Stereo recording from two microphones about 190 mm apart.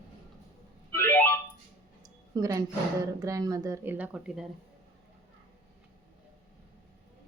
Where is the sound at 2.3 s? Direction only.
20° right (ahead or behind).